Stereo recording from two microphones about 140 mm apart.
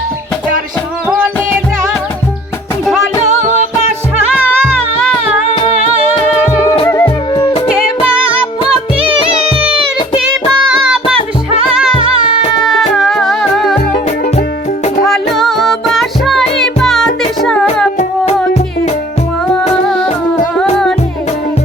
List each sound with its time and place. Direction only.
1.0 s music: 10° right (ahead or behind)
3.2 s music: 55° right (ahead or behind)
6.8 s music: 20° left (ahead or behind)
10.7 s music: 10° right (ahead or behind)
11.9 s music: 40° left (ahead or behind)
12.6 s music: centre (ahead or behind)
15.0 s music: centre (ahead or behind)